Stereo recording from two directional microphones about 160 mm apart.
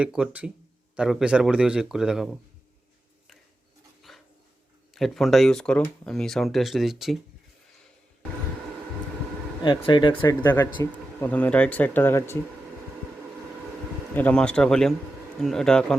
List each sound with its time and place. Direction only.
0.0 s speech: 5° right (ahead or behind)
4.1 s dog: centre (ahead or behind)
4.9 s speech: centre (ahead or behind)
9.6 s speech: 30° left (ahead or behind)
10.4 s speech: 15° left (ahead or behind)
14.1 s speech: 10° left (ahead or behind)